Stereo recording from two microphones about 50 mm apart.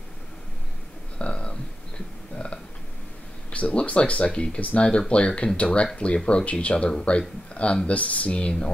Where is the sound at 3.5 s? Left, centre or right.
Left.